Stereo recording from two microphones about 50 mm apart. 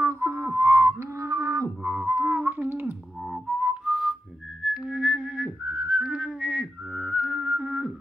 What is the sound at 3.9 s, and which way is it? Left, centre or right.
Whistling, centre.